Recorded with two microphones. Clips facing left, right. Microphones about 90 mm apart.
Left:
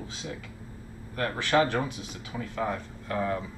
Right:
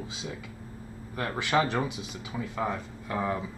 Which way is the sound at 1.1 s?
15° right (ahead or behind).